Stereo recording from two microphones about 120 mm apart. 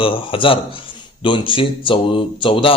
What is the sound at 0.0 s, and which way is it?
Speech, 45° left (ahead or behind).